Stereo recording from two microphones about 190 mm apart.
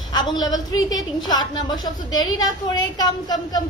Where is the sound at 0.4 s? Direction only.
20° left (ahead or behind).